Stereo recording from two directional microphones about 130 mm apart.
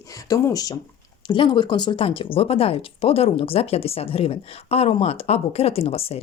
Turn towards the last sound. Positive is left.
turn(degrees=50)  # may be behind; listen again after turning